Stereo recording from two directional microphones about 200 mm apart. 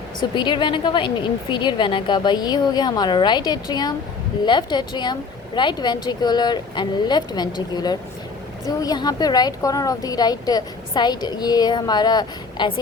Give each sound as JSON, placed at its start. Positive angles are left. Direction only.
{"t": 0.2, "sound": "a woman's voice", "side_deg": 25}